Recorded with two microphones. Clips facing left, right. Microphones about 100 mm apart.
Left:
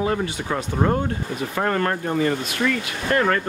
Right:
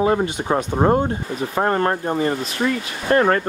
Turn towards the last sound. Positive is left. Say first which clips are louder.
# right 4 dB
turn(degrees=-30)  # may be behind; listen again after turning